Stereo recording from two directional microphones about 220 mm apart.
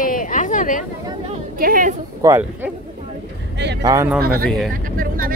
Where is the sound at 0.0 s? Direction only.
40° left (ahead or behind).